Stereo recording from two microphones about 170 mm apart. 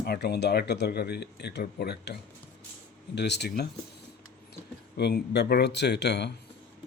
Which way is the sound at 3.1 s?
80° left.